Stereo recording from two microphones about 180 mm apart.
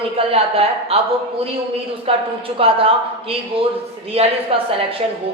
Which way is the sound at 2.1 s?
30° right (ahead or behind).